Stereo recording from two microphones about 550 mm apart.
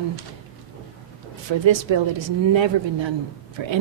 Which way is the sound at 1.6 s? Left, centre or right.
Right.